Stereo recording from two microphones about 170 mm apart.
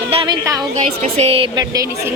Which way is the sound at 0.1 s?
30° right (ahead or behind).